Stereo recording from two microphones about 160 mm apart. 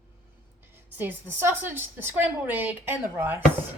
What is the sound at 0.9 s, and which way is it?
A woman's voice, 15° right (ahead or behind).